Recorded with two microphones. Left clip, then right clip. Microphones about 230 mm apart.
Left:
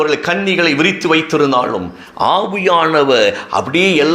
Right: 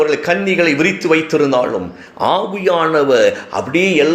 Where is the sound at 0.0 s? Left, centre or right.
Left.